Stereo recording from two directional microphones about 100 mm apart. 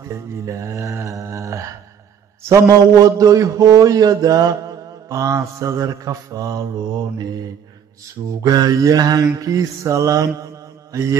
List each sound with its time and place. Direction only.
0.0 s mantra: 35° right (ahead or behind)
2.5 s a man's voice: 35° right (ahead or behind)
8.3 s a man's voice: 40° right (ahead or behind)